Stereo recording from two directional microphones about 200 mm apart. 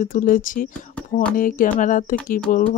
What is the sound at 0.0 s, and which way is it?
A woman's voice, 40° left (ahead or behind).